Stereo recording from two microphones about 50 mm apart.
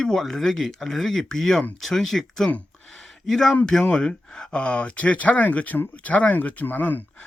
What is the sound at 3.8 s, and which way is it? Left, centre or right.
Speech, centre.